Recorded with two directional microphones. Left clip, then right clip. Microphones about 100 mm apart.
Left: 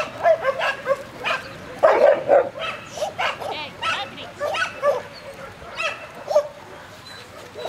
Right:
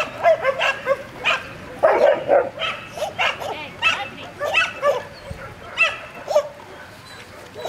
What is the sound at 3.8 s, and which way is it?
Bow-wow, 5° right (ahead or behind).